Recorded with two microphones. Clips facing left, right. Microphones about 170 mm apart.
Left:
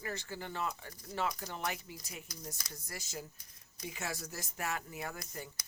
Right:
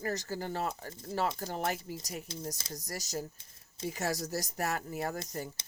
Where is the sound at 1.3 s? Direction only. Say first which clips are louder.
Right 5 dB; 40° right (ahead or behind).